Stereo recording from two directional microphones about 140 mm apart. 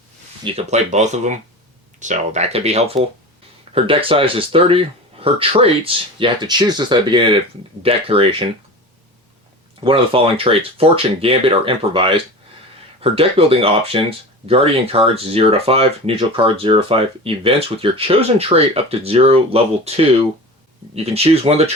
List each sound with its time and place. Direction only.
0.5 s speech: 55° right (ahead or behind)
9.8 s speech: 40° right (ahead or behind)